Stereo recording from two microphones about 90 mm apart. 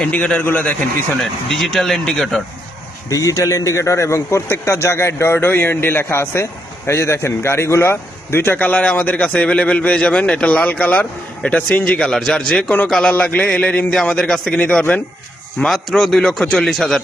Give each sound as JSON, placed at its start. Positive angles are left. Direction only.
{"t": 0.0, "sound": "a man's voice", "side_deg": 10}
{"t": 1.2, "sound": "speech", "side_deg": 0}
{"t": 3.1, "sound": "a man's voice", "side_deg": 40}
{"t": 15.5, "sound": "speech", "side_deg": 5}